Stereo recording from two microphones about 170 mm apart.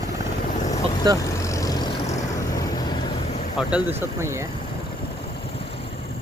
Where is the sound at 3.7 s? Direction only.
15° right (ahead or behind).